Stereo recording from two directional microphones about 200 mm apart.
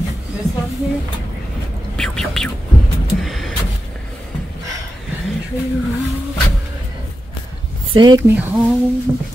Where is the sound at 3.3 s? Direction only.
Centre (ahead or behind).